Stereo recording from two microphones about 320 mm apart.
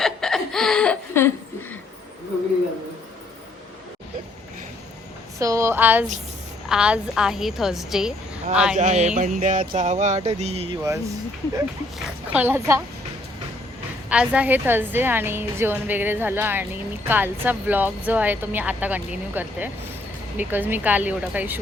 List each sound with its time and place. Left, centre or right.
0.0 s chuckle: centre
5.4 s a woman's voice: centre
8.7 s a sound: right
11.5 s a woman's voice: centre
14.1 s a woman's voice: centre